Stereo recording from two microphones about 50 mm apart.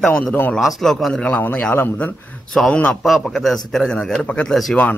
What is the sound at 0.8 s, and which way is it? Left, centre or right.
Speech, centre.